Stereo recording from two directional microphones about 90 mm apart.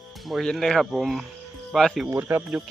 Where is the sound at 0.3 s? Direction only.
Centre (ahead or behind).